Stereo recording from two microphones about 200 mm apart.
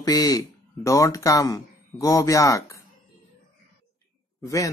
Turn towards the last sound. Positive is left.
turn(degrees=15)  # may be behind; listen again after turning